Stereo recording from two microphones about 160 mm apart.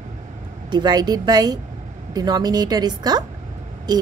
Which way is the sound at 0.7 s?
25° right (ahead or behind).